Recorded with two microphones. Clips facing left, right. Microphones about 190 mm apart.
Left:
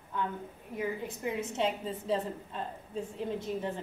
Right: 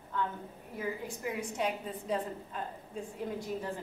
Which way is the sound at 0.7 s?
25° left (ahead or behind).